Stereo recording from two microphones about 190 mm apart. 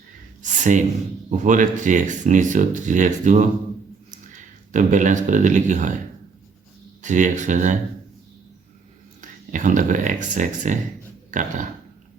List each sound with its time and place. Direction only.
0.6 s speech: 40° right (ahead or behind)
7.0 s speech: 40° right (ahead or behind)
9.5 s speech: 40° right (ahead or behind)
11.3 s dog: 40° right (ahead or behind)